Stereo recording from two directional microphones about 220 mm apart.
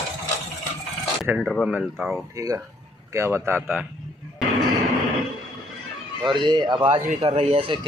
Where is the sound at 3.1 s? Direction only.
10° right (ahead or behind).